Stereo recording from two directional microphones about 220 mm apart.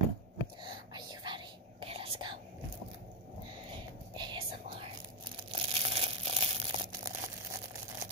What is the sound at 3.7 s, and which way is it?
Crumpling, 20° right (ahead or behind).